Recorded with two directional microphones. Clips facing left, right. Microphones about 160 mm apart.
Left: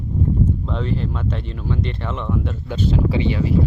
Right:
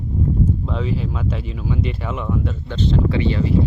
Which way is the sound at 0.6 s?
5° right (ahead or behind).